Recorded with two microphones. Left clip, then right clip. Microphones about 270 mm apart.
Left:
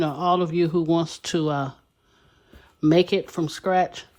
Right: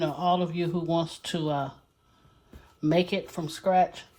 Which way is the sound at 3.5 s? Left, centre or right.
Left.